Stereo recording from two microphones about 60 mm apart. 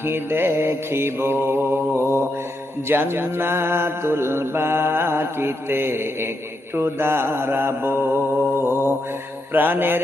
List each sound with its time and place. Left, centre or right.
0.0 s mantra: right